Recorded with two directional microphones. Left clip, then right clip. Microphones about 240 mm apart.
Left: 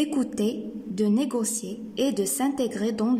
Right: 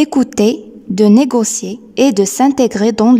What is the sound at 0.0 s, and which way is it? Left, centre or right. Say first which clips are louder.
Speech: right 14 dB; right.